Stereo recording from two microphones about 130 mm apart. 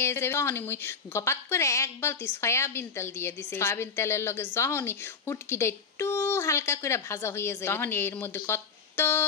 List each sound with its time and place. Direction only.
0.0 s speech: 20° left (ahead or behind)